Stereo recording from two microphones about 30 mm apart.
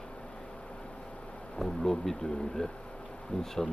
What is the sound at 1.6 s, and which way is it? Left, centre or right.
Speech, centre.